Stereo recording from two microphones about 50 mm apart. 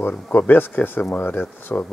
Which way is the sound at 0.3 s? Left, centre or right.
Left.